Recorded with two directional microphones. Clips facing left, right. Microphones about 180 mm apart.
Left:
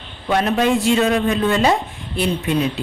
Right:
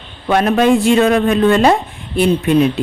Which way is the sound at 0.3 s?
60° right (ahead or behind).